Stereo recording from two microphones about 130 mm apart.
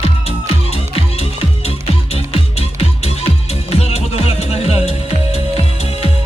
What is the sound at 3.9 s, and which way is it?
Music, 50° left (ahead or behind).